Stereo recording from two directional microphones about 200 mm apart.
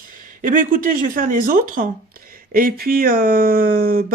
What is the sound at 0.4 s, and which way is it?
Speech, 40° right (ahead or behind).